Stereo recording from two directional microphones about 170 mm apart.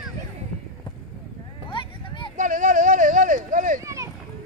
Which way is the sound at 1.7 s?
30° left (ahead or behind).